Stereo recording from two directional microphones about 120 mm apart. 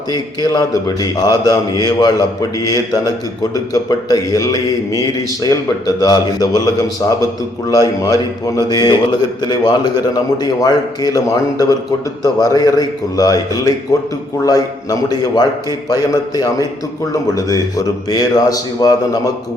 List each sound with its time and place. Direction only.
0.1 s a man's voice: 35° left (ahead or behind)